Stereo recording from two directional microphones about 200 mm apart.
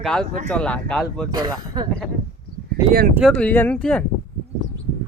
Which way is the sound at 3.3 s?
10° left (ahead or behind).